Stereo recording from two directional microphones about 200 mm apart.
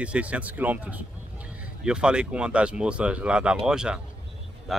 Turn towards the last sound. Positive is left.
turn(degrees=0)  # may be behind; listen again after turning